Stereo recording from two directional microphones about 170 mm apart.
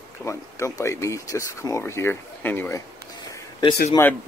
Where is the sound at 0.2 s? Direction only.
15° left (ahead or behind).